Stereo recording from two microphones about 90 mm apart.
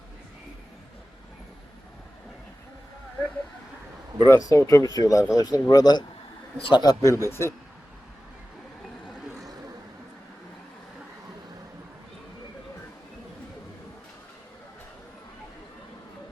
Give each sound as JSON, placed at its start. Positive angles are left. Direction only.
{"t": 4.3, "sound": "speech", "side_deg": 35}
{"t": 7.0, "sound": "speech", "side_deg": 30}